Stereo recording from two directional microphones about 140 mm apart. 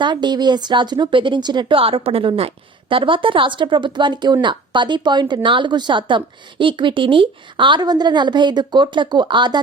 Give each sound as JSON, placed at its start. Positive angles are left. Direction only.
{"t": 0.0, "sound": "speech", "side_deg": -30}